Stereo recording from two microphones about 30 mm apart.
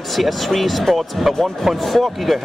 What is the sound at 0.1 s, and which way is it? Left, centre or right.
Speech, centre.